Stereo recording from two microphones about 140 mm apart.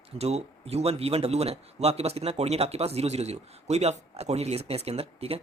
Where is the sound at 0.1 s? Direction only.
50° right (ahead or behind).